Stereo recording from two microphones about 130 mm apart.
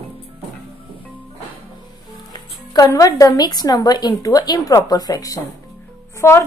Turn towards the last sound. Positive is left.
turn(degrees=20)  # may be behind; listen again after turning